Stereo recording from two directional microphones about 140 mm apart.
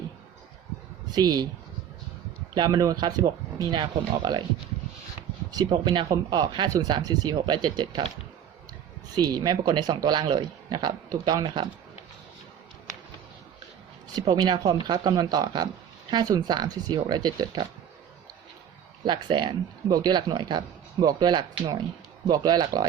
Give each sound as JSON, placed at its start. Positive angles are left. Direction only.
{"t": 1.1, "sound": "speech", "side_deg": -30}
{"t": 2.6, "sound": "speech", "side_deg": -30}
{"t": 5.5, "sound": "speech", "side_deg": -30}
{"t": 9.1, "sound": "speech", "side_deg": -30}
{"t": 14.2, "sound": "speech", "side_deg": -30}
{"t": 19.0, "sound": "speech", "side_deg": -35}